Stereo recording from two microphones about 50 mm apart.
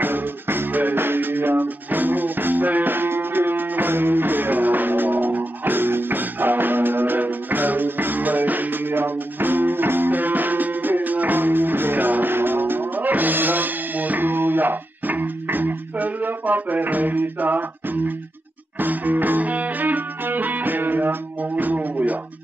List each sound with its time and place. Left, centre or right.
0.0 s music: right